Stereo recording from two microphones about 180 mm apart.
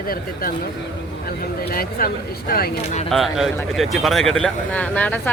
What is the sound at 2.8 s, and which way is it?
Speech, 35° left (ahead or behind).